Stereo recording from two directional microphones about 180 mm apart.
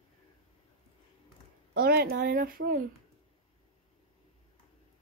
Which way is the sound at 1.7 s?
60° right (ahead or behind).